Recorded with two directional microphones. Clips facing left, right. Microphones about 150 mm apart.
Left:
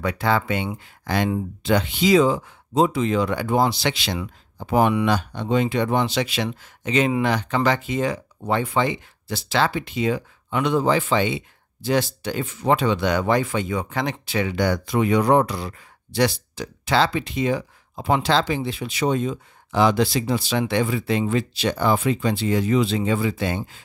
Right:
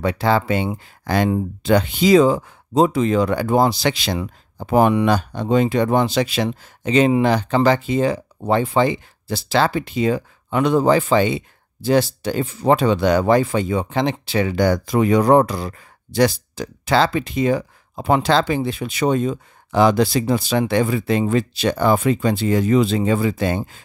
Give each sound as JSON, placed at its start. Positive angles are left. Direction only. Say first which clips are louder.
{"t": 0.0, "sound": "speech", "louder": "right 4 dB", "side_deg": -30}